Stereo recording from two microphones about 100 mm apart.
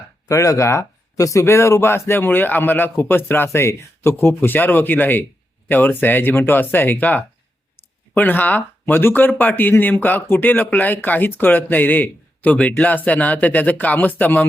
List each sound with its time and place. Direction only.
0.3 s speech: 30° left (ahead or behind)